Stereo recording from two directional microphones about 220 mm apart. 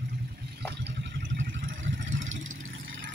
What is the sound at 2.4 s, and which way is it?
Vehicle, 65° right (ahead or behind).